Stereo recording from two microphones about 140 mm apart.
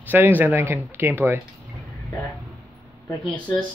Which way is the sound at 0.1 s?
15° right (ahead or behind).